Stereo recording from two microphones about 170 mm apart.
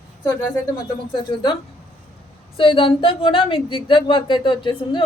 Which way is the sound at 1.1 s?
25° left (ahead or behind).